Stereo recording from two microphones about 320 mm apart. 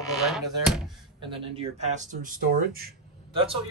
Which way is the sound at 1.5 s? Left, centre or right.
Centre.